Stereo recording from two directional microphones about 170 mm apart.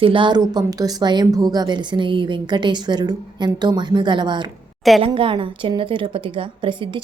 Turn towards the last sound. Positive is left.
turn(degrees=-30)  # may be behind; listen again after turning